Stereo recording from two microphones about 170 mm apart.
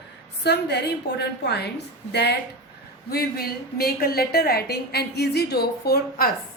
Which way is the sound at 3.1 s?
60° left (ahead or behind).